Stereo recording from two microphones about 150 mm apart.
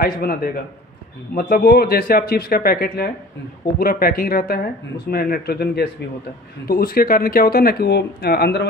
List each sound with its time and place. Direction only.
0.0 s speech: 85° left